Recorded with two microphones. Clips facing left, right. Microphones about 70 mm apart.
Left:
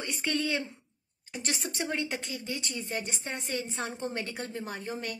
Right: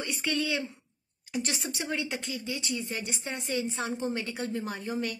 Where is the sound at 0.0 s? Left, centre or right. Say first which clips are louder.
Right 1 dB; left.